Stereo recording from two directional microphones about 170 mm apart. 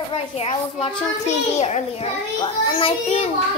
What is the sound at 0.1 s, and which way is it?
A child's voice, 35° left (ahead or behind).